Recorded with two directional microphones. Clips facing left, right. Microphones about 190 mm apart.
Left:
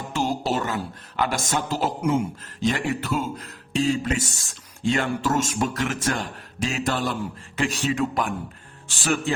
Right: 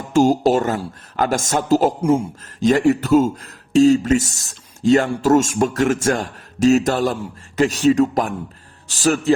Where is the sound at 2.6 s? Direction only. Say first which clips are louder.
Right 9 dB; 45° right (ahead or behind).